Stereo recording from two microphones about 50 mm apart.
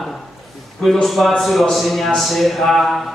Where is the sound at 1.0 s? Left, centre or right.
Centre.